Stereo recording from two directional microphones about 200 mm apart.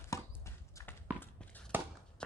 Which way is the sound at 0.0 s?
15° left (ahead or behind).